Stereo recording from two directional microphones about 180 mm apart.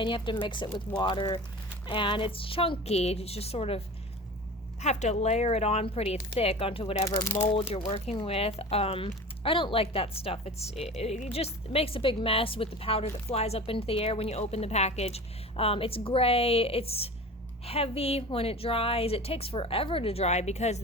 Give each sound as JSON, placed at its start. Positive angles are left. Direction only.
{"t": 0.0, "sound": "a woman's voice", "side_deg": 25}
{"t": 7.2, "sound": "speech", "side_deg": 15}
{"t": 7.7, "sound": "a woman's voice", "side_deg": 35}